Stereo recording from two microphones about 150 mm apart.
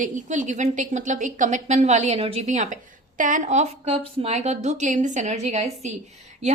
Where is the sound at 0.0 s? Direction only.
55° right (ahead or behind).